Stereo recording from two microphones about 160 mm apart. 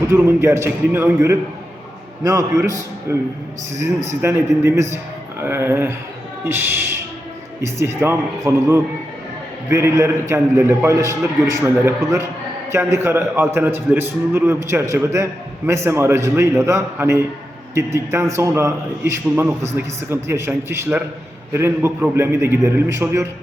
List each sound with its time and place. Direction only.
0.1 s a man's voice: 15° right (ahead or behind)